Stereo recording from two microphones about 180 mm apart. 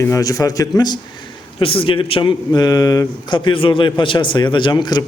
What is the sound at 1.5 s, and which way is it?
A man's voice, 30° left (ahead or behind).